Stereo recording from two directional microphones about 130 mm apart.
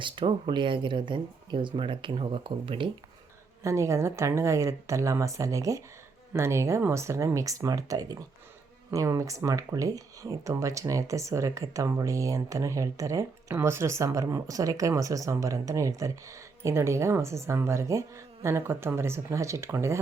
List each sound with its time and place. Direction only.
0.0 s speech: 40° right (ahead or behind)
3.6 s speech: 25° right (ahead or behind)